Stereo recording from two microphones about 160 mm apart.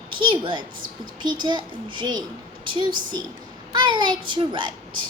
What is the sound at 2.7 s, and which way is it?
A child's voice, 30° right (ahead or behind).